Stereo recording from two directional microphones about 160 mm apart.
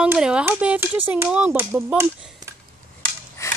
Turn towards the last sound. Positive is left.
turn(degrees=20)  # may be behind; listen again after turning